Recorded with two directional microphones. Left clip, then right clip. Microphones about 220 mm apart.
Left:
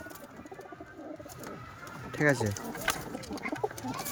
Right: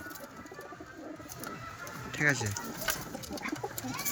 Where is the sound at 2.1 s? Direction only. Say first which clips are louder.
Left 2 dB; 20° left (ahead or behind).